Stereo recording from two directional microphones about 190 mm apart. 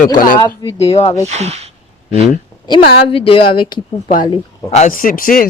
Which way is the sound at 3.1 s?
30° left (ahead or behind).